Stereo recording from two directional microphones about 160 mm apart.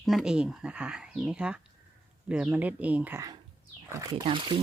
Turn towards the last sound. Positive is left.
turn(degrees=-30)  # may be behind; listen again after turning